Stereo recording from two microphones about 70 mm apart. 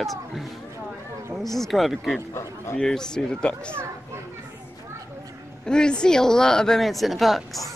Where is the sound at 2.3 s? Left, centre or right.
Left.